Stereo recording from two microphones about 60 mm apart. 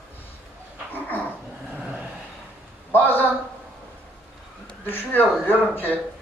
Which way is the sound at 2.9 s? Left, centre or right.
Left.